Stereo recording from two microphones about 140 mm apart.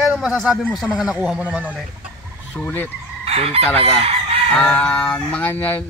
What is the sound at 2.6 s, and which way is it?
Speech, 15° left (ahead or behind).